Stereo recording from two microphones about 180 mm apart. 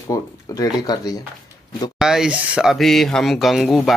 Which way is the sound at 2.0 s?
5° right (ahead or behind).